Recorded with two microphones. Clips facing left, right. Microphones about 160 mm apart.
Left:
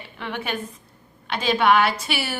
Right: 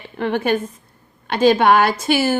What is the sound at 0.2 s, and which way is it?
A woman's voice, 45° right (ahead or behind).